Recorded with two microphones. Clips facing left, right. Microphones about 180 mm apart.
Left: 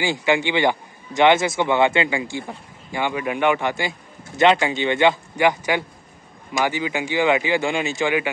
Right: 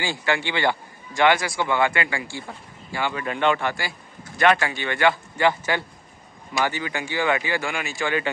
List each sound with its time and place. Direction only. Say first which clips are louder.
0.0 s a man's voice: left 5 dB; 15° left (ahead or behind)